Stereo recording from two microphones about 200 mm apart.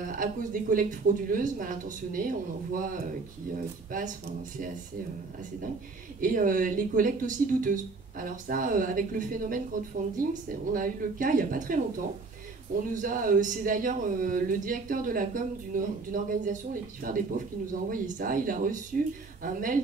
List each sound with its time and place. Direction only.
0.0 s speech: 40° right (ahead or behind)
3.9 s speech: 40° right (ahead or behind)
6.2 s speech: 45° right (ahead or behind)
12.9 s speech: 45° right (ahead or behind)